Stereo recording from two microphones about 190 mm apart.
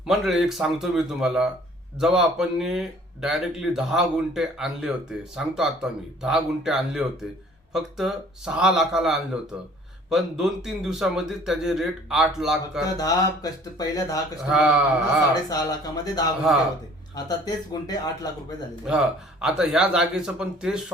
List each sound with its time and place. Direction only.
0.0 s speech: centre (ahead or behind)
12.8 s speech: 20° left (ahead or behind)
14.5 s speech: centre (ahead or behind)
15.4 s speech: 20° left (ahead or behind)
18.9 s speech: 5° right (ahead or behind)